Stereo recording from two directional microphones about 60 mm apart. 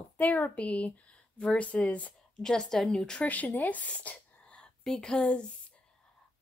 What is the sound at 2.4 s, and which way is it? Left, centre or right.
Speech, centre.